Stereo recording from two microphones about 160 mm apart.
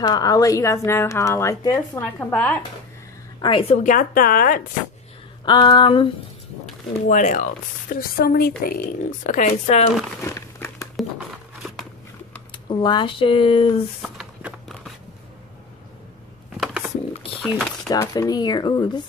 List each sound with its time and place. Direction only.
0.0 s speech: 25° left (ahead or behind)
2.0 s a woman's voice: 10° left (ahead or behind)
3.3 s a woman's voice: 30° left (ahead or behind); by 4.6 s 60° left (ahead or behind)
5.4 s speech: 25° left (ahead or behind)
7.1 s a woman's voice: 50° left (ahead or behind)
8.2 s speech: 65° left (ahead or behind)
9.2 s a woman's voice: 50° left (ahead or behind)
10.2 s crumpling: 20° left (ahead or behind)
11.0 s crumpling: 5° right (ahead or behind)
12.6 s speech: 30° left (ahead or behind)
14.0 s a sound: 5° right (ahead or behind)
16.5 s a sound: centre (ahead or behind)
17.4 s speech: centre (ahead or behind)
17.8 s speech: 20° left (ahead or behind)